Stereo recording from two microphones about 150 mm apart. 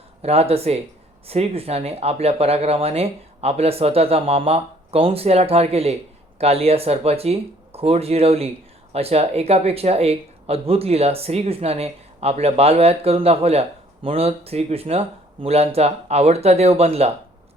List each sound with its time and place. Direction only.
0.2 s speech: 40° right (ahead or behind)